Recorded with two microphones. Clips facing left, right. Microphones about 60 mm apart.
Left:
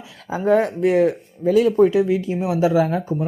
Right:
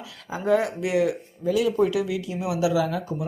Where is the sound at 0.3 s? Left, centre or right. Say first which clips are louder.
Left 5 dB; left.